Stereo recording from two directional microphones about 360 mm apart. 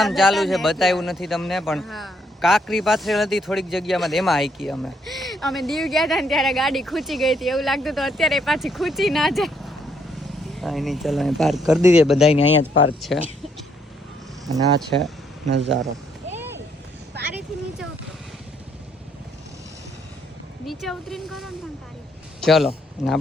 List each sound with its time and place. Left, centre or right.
0.0 s a man's voice: centre
12.4 s speech: left
13.0 s a man's voice: centre
15.4 s speech: right
20.7 s a man's voice: centre